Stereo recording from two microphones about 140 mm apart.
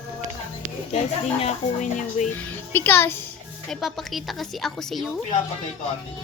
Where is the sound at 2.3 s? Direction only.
15° left (ahead or behind).